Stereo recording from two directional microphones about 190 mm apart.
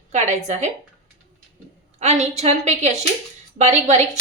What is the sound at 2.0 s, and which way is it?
A woman's voice, 35° right (ahead or behind).